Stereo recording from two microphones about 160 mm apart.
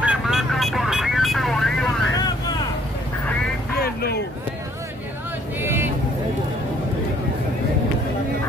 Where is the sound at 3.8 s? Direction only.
75° left (ahead or behind).